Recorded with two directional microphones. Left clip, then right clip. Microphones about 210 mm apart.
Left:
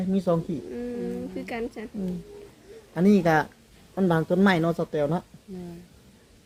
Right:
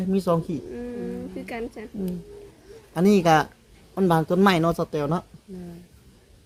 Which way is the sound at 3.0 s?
55° right (ahead or behind).